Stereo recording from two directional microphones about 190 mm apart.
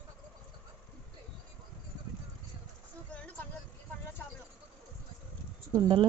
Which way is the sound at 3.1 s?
10° left (ahead or behind).